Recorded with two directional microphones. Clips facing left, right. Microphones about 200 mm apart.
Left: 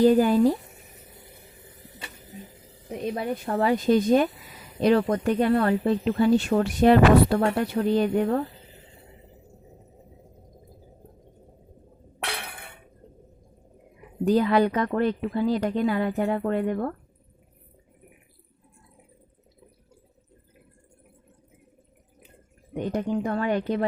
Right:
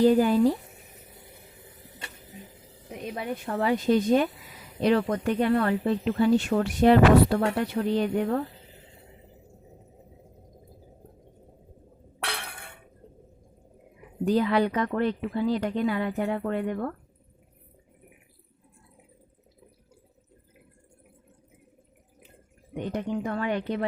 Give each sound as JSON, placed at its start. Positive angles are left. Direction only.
{"t": 0.0, "sound": "speech", "side_deg": 45}
{"t": 3.2, "sound": "speech", "side_deg": 40}
{"t": 12.2, "sound": "a sound", "side_deg": 20}
{"t": 14.3, "sound": "speech", "side_deg": 45}
{"t": 22.7, "sound": "speech", "side_deg": 40}